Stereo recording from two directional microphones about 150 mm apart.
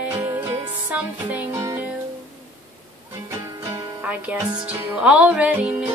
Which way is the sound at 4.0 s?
10° right (ahead or behind).